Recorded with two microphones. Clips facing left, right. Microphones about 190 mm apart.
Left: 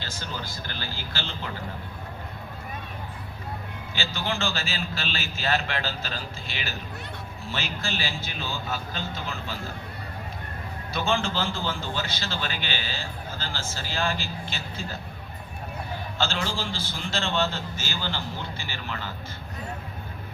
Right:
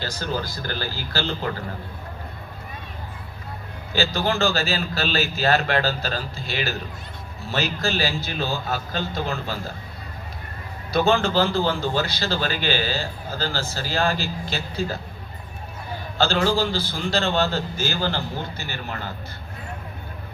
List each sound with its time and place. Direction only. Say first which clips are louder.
0.0 s a man's voice: right 8 dB; 40° right (ahead or behind)
3.9 s a man's voice: right 8 dB; 40° right (ahead or behind)
10.9 s a man's voice: right 8 dB; 40° right (ahead or behind)
16.1 s a man's voice: right 9 dB; 40° right (ahead or behind)